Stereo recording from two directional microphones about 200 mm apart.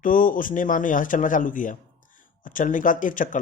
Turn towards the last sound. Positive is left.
turn(degrees=40)  # may be behind; listen again after turning